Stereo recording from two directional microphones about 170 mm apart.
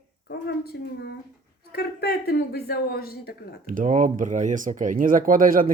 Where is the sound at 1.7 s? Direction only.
70° left (ahead or behind).